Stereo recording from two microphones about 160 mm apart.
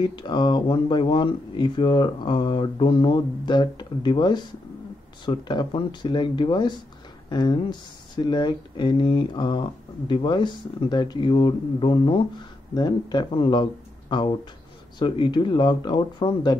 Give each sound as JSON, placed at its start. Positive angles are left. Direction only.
{"t": 0.0, "sound": "speech", "side_deg": 30}